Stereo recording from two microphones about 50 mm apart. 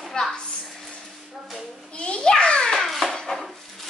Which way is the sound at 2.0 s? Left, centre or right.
Centre.